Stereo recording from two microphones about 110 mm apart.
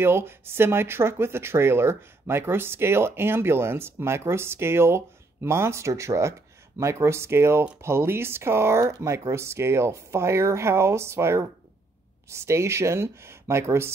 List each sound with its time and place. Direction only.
0.0 s speech: 20° right (ahead or behind)